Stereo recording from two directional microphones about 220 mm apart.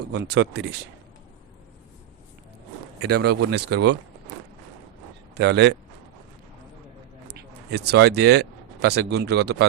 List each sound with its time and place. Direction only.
0.1 s speech: 55° right (ahead or behind)
3.0 s speech: 50° right (ahead or behind)
5.3 s speech: 50° right (ahead or behind)
7.3 s speech: 50° right (ahead or behind)